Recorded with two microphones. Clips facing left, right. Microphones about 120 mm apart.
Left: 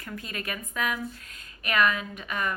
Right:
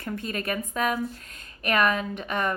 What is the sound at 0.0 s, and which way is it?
A woman's voice, 35° right (ahead or behind).